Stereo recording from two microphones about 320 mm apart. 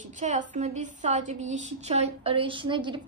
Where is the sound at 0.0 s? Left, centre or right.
Right.